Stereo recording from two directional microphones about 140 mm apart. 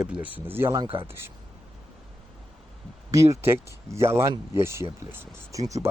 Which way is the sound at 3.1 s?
20° right (ahead or behind).